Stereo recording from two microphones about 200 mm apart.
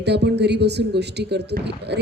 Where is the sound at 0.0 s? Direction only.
55° right (ahead or behind).